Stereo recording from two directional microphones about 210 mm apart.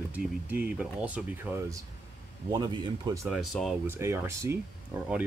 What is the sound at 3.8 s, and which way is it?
Speech, 10° right (ahead or behind).